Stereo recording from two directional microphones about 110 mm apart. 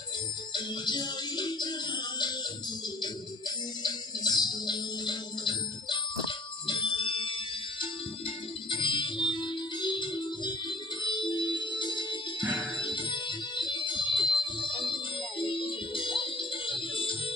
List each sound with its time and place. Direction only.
0.5 s music: 40° left (ahead or behind)
3.8 s music: 40° left (ahead or behind)
8.6 s music: 45° left (ahead or behind)